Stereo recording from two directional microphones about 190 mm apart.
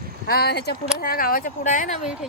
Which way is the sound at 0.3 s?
55° left (ahead or behind).